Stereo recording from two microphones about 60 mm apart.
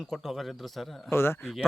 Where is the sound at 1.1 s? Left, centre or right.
Left.